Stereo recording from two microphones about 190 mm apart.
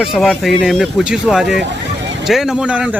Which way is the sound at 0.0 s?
Centre (ahead or behind).